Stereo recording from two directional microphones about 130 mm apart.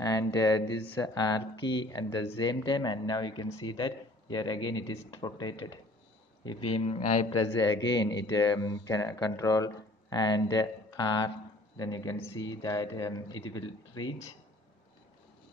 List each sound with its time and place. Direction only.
0.0 s speech: 30° left (ahead or behind)
6.9 s a man's voice: 65° left (ahead or behind)
7.3 s speech: 30° left (ahead or behind)